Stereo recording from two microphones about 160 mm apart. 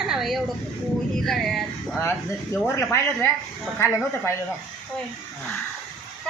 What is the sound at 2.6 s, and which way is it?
Speech, 15° left (ahead or behind).